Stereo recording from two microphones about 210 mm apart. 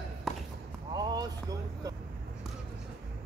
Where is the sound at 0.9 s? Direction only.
20° right (ahead or behind).